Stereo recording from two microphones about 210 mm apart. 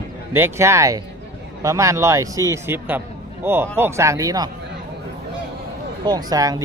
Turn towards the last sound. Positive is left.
turn(degrees=-15)  # may be behind; listen again after turning